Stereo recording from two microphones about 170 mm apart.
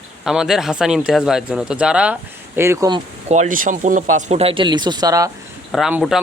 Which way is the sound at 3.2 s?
45° right (ahead or behind).